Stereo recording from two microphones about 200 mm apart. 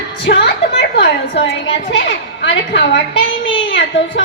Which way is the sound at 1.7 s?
65° left (ahead or behind).